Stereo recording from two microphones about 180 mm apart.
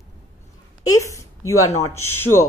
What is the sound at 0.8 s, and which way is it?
A man's voice, 15° left (ahead or behind).